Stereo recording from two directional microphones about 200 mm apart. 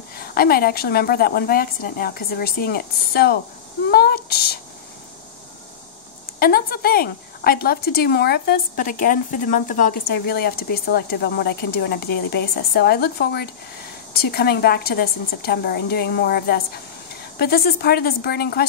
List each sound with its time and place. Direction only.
0.2 s speech: 50° left (ahead or behind)
6.4 s speech: 50° left (ahead or behind)
10.1 s speech: 55° left (ahead or behind)